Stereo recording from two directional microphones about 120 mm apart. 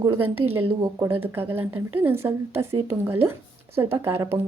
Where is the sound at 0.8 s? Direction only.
30° right (ahead or behind).